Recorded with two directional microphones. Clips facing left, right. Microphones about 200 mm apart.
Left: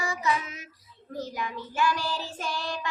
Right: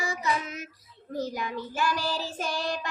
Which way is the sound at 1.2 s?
40° right (ahead or behind).